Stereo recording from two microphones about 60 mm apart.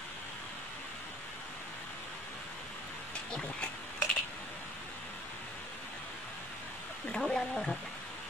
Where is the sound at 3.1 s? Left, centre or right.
Centre.